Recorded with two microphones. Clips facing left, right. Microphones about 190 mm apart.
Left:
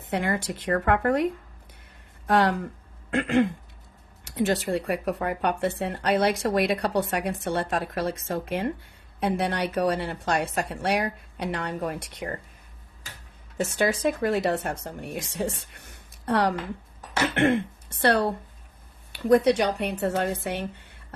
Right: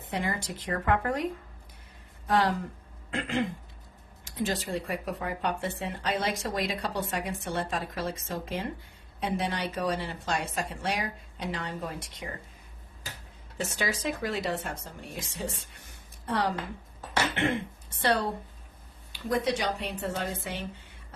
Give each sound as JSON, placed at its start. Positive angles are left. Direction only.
{"t": 0.1, "sound": "a woman's voice", "side_deg": 65}
{"t": 13.7, "sound": "a woman's voice", "side_deg": 55}
{"t": 19.5, "sound": "a woman's voice", "side_deg": 65}